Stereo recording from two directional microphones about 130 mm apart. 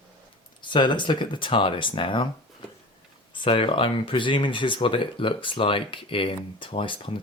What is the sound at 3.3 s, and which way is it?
Speech, 40° left (ahead or behind).